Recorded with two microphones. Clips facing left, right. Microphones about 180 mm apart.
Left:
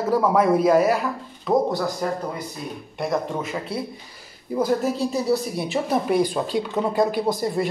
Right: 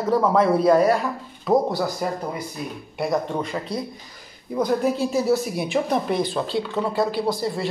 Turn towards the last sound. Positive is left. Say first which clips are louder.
# left 1 dB
turn(degrees=20)  # may be behind; listen again after turning